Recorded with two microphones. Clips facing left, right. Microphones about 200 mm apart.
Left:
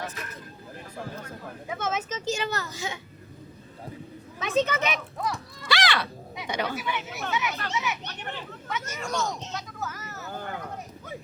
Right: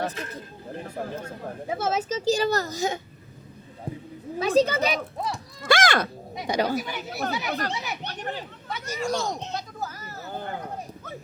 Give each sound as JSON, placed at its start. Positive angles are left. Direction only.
{"t": 0.0, "sound": "speech", "side_deg": -30}
{"t": 4.4, "sound": "speech", "side_deg": -35}
{"t": 5.6, "sound": "speech", "side_deg": -45}
{"t": 9.5, "sound": "a sound", "side_deg": -35}